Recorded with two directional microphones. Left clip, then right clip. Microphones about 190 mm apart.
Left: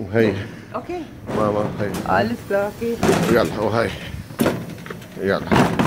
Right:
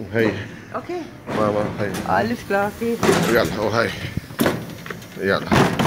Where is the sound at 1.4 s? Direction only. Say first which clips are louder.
Even; centre (ahead or behind).